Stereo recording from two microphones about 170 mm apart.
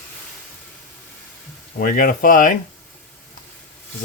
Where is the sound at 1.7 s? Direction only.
55° left (ahead or behind).